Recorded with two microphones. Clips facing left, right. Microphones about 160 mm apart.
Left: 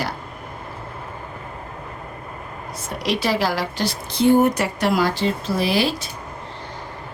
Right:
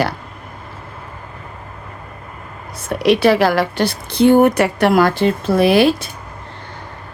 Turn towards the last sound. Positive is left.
turn(degrees=-60)  # may be behind; listen again after turning